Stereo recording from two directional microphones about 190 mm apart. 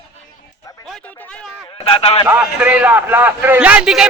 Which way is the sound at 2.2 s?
10° right (ahead or behind).